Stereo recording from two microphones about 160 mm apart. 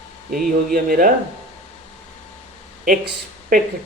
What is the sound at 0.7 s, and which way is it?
Speech, 65° right (ahead or behind).